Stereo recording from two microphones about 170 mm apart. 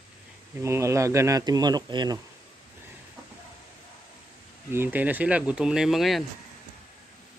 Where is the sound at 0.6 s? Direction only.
15° right (ahead or behind).